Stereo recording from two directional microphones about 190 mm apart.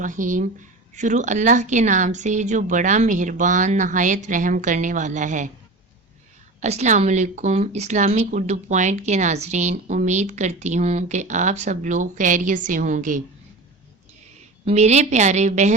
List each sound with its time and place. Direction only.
0.0 s speech: 40° right (ahead or behind)
6.6 s speech: 35° right (ahead or behind)
14.6 s speech: 35° right (ahead or behind)